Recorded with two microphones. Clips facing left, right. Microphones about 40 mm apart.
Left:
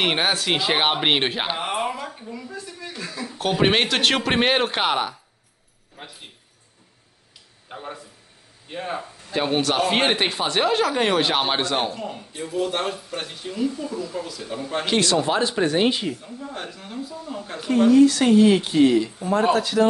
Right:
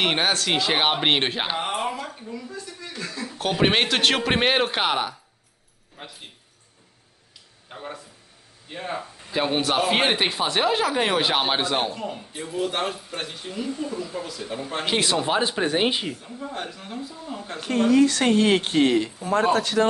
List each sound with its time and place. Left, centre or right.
0.0 s speech: centre
7.7 s a man's voice: centre
9.3 s speech: centre
18.0 s speech: right